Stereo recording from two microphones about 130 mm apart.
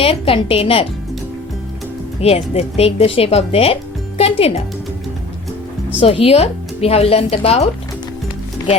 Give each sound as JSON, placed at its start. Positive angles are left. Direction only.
{"t": 0.0, "sound": "speech", "side_deg": 45}
{"t": 2.2, "sound": "speech", "side_deg": 50}
{"t": 6.0, "sound": "speech", "side_deg": 50}